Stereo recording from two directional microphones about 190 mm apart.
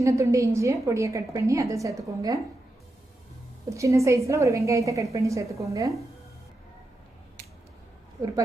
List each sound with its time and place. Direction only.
0.0 s a woman's voice: 15° right (ahead or behind)
3.7 s a woman's voice: 15° right (ahead or behind)